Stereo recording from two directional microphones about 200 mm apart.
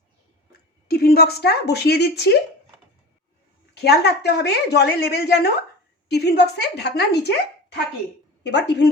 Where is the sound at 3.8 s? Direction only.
55° left (ahead or behind).